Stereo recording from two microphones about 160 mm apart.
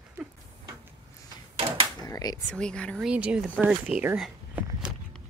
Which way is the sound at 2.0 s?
20° left (ahead or behind).